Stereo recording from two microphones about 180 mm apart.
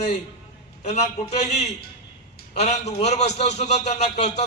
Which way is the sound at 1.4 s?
40° left (ahead or behind).